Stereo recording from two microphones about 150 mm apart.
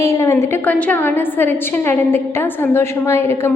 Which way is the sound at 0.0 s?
20° left (ahead or behind).